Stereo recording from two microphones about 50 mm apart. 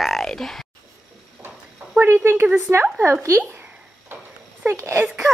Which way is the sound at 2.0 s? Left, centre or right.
Right.